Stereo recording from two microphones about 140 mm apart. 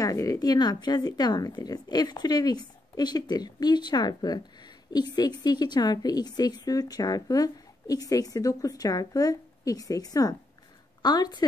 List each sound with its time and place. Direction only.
0.0 s a woman's voice: 25° left (ahead or behind)